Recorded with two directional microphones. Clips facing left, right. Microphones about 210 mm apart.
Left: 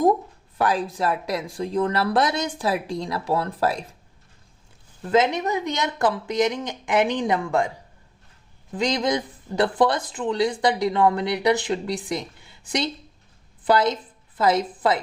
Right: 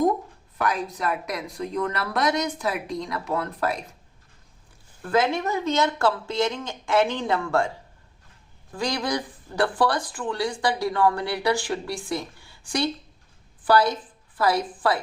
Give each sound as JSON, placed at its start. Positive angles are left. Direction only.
{"t": 0.6, "sound": "speech", "side_deg": 30}
{"t": 5.0, "sound": "speech", "side_deg": 20}
{"t": 8.7, "sound": "a woman's voice", "side_deg": 20}